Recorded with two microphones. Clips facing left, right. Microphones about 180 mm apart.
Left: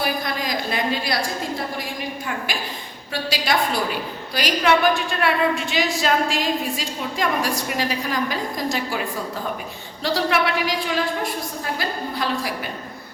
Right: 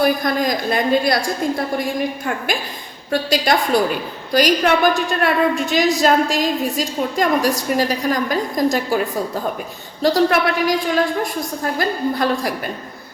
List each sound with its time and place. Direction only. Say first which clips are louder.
0.0 s a woman's voice: right 8 dB; 45° right (ahead or behind)
10.0 s a woman's voice: right 6 dB; 45° right (ahead or behind)